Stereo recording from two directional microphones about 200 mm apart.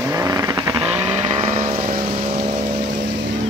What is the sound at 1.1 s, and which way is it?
Vehicle, 35° right (ahead or behind).